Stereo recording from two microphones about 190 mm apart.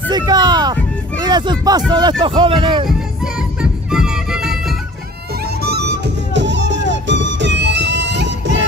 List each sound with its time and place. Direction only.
0.1 s speech: 20° right (ahead or behind)
3.9 s music: 5° right (ahead or behind)
5.4 s music: 60° right (ahead or behind)